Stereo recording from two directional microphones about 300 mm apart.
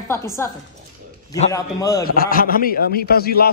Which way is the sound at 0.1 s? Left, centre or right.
Centre.